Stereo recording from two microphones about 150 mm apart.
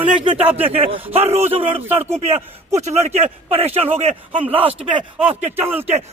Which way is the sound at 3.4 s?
40° right (ahead or behind).